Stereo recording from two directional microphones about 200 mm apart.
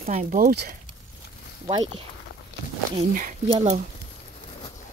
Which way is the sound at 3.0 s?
40° right (ahead or behind).